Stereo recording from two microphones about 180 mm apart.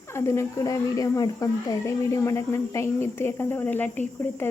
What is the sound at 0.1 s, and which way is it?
Speech, 15° left (ahead or behind).